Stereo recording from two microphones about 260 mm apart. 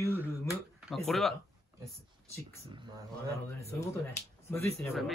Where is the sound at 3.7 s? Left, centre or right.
Centre.